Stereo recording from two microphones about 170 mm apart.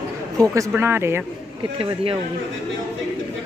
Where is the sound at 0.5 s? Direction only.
15° right (ahead or behind).